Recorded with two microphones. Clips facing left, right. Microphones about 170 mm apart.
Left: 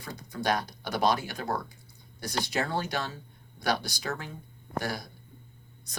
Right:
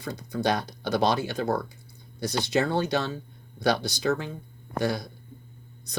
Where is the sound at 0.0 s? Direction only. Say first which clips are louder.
Right 5 dB; 25° right (ahead or behind).